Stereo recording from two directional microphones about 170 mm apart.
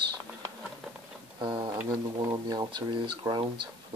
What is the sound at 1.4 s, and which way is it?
Speech, 25° right (ahead or behind).